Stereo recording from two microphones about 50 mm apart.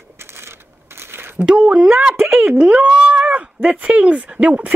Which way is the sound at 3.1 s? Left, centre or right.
Right.